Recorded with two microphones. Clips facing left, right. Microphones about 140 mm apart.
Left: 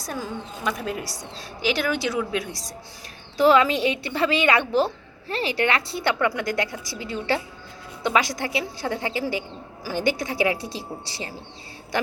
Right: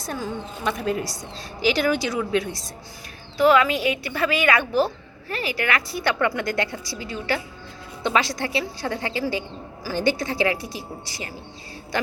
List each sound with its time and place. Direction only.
0.0 s a woman's voice: 5° left (ahead or behind)
3.4 s a woman's voice: 30° left (ahead or behind)
6.1 s a woman's voice: 5° left (ahead or behind)
7.0 s a woman's voice: 25° left (ahead or behind)
8.0 s a woman's voice: 10° left (ahead or behind)
10.8 s a woman's voice: 25° left (ahead or behind)